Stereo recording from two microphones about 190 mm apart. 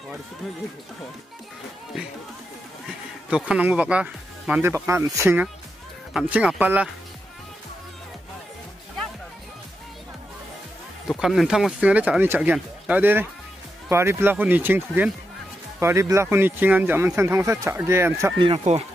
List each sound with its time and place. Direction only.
3.3 s speech: 5° right (ahead or behind)
11.1 s speech: centre (ahead or behind)
18.4 s speech: 30° right (ahead or behind)